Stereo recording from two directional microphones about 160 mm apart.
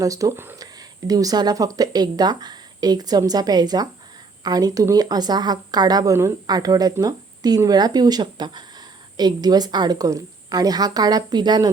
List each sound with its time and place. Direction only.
0.0 s a woman's voice: 20° right (ahead or behind)